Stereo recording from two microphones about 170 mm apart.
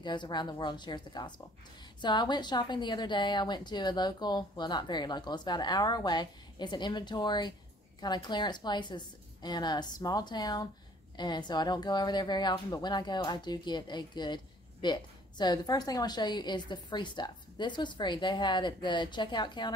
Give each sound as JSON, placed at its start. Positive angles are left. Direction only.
{"t": 0.0, "sound": "a woman's voice", "side_deg": 25}